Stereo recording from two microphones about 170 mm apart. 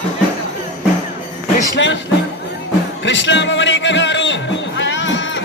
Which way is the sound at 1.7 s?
90° left.